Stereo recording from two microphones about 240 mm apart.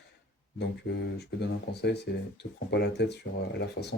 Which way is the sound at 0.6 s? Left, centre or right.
Left.